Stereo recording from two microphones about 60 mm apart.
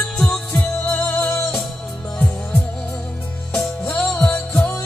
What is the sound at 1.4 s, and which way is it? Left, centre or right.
Music, centre.